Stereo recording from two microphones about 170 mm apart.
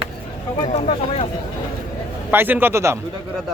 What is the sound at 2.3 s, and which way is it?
Speech, 10° right (ahead or behind).